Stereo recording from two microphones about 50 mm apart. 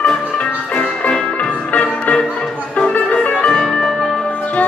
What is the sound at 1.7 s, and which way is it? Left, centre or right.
Music, left.